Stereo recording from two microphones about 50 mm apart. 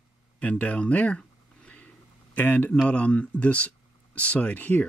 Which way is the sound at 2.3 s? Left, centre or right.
Left.